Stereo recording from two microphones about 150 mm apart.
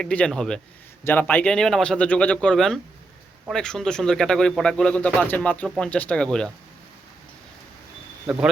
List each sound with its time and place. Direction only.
0.0 s speech: 5° left (ahead or behind)
8.3 s speech: 5° right (ahead or behind)